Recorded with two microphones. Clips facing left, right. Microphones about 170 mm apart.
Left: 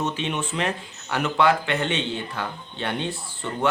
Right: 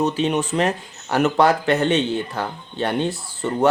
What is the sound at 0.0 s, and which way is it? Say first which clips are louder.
Speech: right 7 dB; 40° right (ahead or behind).